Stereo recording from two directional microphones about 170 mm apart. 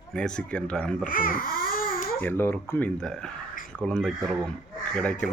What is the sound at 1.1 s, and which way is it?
Babbling, 55° left (ahead or behind).